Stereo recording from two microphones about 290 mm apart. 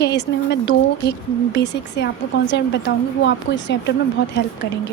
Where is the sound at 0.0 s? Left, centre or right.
Left.